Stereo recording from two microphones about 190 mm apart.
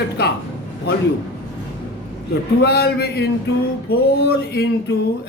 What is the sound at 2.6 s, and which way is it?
A man's voice, 55° left (ahead or behind).